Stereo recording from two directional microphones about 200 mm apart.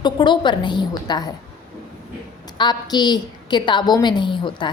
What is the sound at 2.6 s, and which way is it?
A woman's voice, 20° left (ahead or behind).